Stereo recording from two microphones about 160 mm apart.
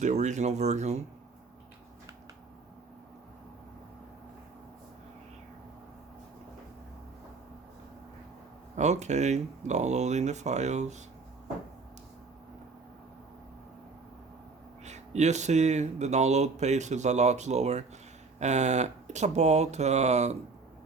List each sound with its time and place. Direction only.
0.0 s speech: 45° right (ahead or behind)
8.7 s speech: 45° right (ahead or behind)
14.8 s speech: 45° right (ahead or behind)